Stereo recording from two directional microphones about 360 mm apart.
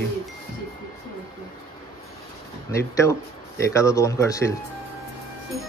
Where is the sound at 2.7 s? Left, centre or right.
Centre.